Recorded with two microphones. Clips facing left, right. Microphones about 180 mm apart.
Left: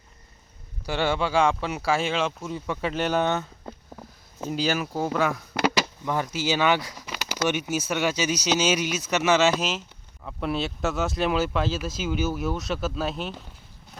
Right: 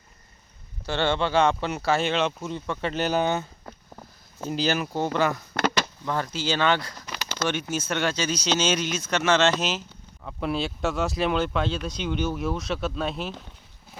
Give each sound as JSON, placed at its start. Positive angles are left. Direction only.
{"t": 0.9, "sound": "speech", "side_deg": 5}